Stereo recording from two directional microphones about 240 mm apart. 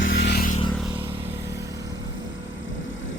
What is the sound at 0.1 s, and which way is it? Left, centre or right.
Vehicle, left.